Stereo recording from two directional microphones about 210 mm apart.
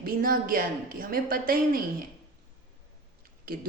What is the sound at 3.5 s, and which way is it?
Speech, 45° right (ahead or behind).